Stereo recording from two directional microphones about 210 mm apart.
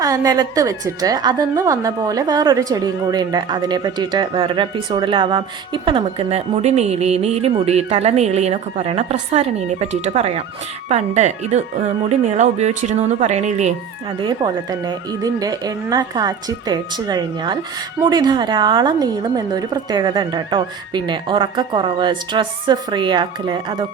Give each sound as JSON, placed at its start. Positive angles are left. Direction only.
{"t": 0.0, "sound": "a woman's voice", "side_deg": -15}
{"t": 14.2, "sound": "a woman's voice", "side_deg": -20}